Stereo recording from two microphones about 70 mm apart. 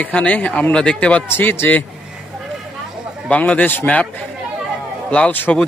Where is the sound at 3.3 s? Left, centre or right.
Centre.